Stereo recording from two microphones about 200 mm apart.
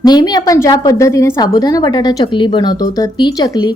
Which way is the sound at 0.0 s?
20° left (ahead or behind).